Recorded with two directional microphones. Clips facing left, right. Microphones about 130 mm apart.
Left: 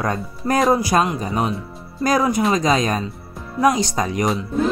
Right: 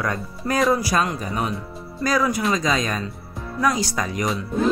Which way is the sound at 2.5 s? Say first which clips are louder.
Left 4 dB; 45° left (ahead or behind).